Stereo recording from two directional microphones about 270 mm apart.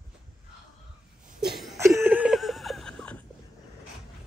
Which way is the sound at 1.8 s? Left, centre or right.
Centre.